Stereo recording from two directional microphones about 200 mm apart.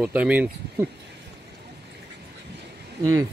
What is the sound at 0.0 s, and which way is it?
Speech, 5° right (ahead or behind).